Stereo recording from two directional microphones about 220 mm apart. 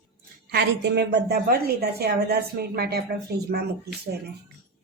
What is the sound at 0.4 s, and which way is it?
A woman's voice, 50° right (ahead or behind).